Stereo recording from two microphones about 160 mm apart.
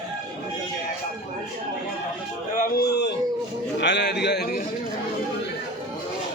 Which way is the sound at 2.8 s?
90° left.